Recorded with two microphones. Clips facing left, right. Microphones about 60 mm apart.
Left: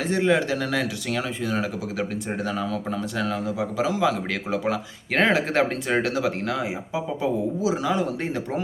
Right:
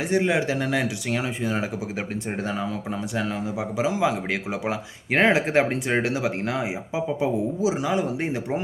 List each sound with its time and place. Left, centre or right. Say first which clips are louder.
0.1 s speech: left 1 dB; centre
3.2 s speech: left 1 dB; right